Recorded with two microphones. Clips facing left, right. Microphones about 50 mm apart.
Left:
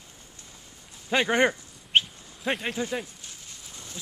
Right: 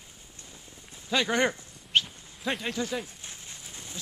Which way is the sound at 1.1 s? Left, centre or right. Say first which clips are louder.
Left 3 dB; left.